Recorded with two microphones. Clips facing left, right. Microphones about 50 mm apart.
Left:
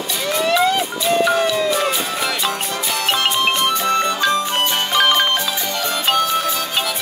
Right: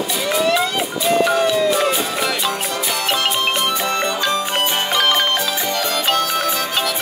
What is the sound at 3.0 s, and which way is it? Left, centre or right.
Music, left.